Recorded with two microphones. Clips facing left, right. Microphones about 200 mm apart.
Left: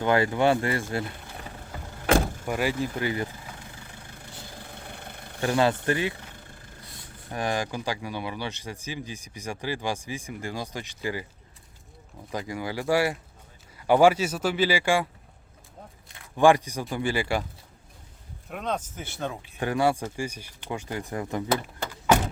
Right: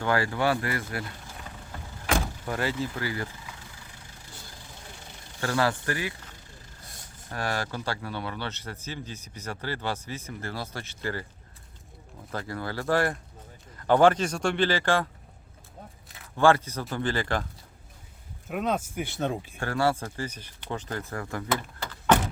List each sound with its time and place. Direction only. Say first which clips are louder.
0.0 s speech: left 4 dB; 20° left (ahead or behind)
2.5 s speech: left 2 dB; 15° left (ahead or behind)
4.2 s vehicle: left 5 dB; 60° left (ahead or behind)
5.4 s speech: left 3 dB; 20° left (ahead or behind)
6.8 s vehicle: even; 45° right (ahead or behind)
7.3 s speech: left 3 dB; 15° left (ahead or behind)
12.3 s speech: left 2 dB; 15° left (ahead or behind)
16.0 s a sound: even; centre (ahead or behind)
16.3 s speech: left 2 dB; 15° left (ahead or behind)
18.4 s speech: right 3 dB; 5° right (ahead or behind)
19.5 s speech: left 4 dB; 15° left (ahead or behind)